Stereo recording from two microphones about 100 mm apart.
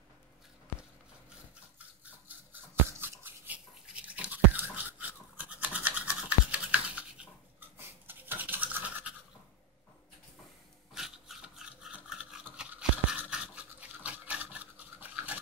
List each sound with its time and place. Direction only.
1.8 s a sound: 15° right (ahead or behind)
5.4 s toothbrush: 15° right (ahead or behind)
10.9 s dog: centre (ahead or behind)
12.5 s toothbrush: 10° right (ahead or behind)